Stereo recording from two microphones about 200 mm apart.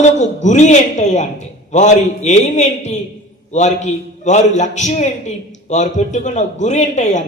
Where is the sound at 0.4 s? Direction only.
35° left (ahead or behind).